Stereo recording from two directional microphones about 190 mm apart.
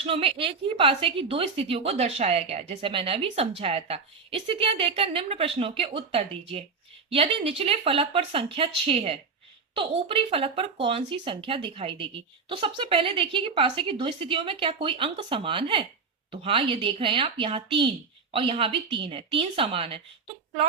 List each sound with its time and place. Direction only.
0.0 s a woman's voice: 30° right (ahead or behind)